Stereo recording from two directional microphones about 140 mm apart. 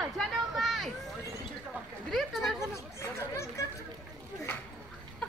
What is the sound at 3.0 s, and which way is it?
Chatter, 20° left (ahead or behind).